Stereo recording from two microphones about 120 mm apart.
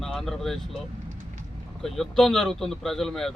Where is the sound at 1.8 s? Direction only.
Centre (ahead or behind).